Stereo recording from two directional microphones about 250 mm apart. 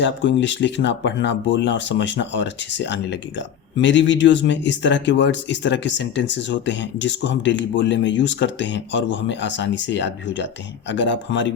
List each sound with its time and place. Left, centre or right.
0.0 s speech: left